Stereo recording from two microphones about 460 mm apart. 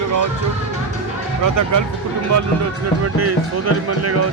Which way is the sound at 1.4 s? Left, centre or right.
Right.